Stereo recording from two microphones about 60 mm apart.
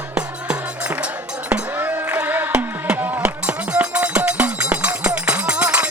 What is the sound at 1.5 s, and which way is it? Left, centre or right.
Music, right.